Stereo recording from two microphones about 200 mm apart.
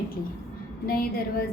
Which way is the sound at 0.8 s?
45° left (ahead or behind).